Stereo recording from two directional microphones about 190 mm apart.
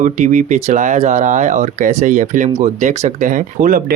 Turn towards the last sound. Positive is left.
turn(degrees=-45)  # may be behind; listen again after turning